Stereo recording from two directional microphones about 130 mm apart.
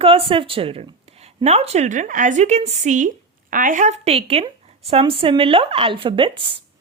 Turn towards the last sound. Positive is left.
turn(degrees=-40)  # may be behind; listen again after turning